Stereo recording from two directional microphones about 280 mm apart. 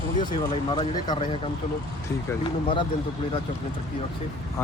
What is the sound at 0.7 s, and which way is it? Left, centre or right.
Speech, centre.